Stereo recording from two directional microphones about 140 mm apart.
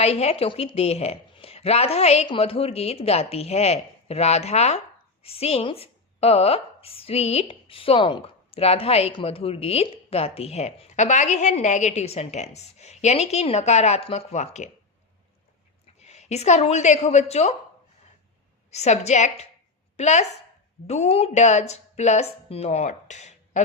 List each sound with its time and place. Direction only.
0.0 s speech: 50° left (ahead or behind)
16.0 s a woman's voice: 50° left (ahead or behind)
18.7 s a woman's voice: 50° left (ahead or behind)